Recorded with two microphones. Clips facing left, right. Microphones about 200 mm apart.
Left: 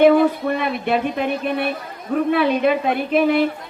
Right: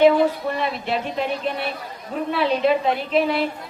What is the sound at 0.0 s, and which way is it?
A man's voice, 55° left (ahead or behind).